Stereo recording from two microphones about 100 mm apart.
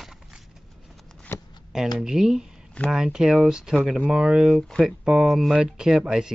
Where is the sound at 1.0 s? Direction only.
5° left (ahead or behind).